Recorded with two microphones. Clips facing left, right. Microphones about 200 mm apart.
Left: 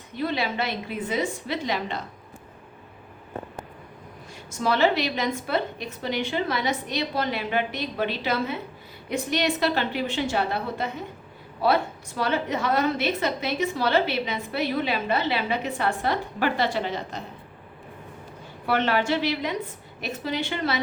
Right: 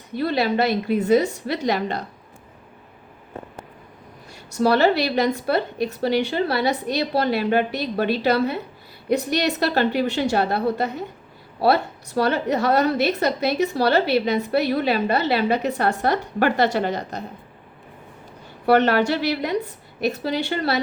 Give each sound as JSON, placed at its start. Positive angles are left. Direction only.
{"t": 0.2, "sound": "a woman's voice", "side_deg": -40}
{"t": 4.6, "sound": "a woman's voice", "side_deg": -40}
{"t": 18.6, "sound": "a woman's voice", "side_deg": -40}